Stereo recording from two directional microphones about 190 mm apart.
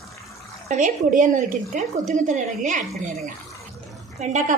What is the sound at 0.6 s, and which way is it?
A man's voice, 40° right (ahead or behind).